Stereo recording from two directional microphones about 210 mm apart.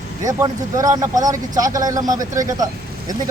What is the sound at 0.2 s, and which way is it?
Speech, 15° right (ahead or behind).